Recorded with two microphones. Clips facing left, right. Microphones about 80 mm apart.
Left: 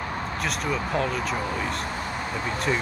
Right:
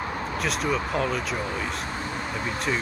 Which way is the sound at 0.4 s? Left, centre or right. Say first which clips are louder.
Right 2 dB; centre.